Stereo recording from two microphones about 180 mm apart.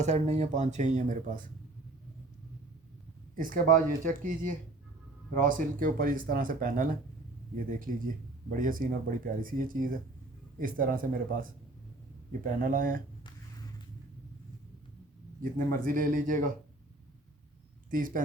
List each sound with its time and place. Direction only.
0.0 s speech: 40° right (ahead or behind)
3.3 s speech: 50° right (ahead or behind)
12.6 s speech: 50° right (ahead or behind)
15.5 s speech: 50° right (ahead or behind)
17.9 s speech: 50° right (ahead or behind)